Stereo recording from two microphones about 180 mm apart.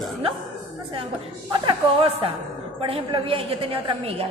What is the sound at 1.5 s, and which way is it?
A woman's voice, 30° right (ahead or behind).